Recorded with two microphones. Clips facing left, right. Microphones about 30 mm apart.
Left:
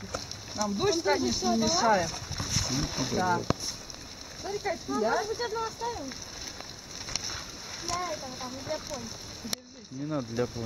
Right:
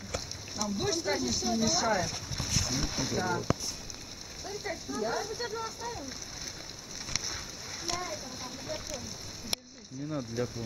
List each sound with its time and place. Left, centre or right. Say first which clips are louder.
0.7 s speech: left 5 dB; centre
4.4 s speech: left 6 dB; centre
7.2 s boat: even; centre
8.0 s speech: left 4 dB; centre
8.7 s speech: left 5 dB; left
9.5 s a sound: even; left
10.0 s speech: left 3 dB; centre